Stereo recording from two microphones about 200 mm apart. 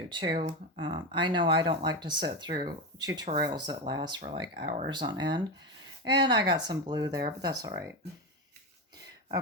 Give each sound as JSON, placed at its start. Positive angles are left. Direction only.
{"t": 0.1, "sound": "speech", "side_deg": -20}